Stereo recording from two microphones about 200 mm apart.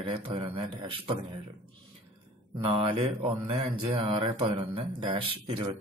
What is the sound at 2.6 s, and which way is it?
Speech, 25° right (ahead or behind).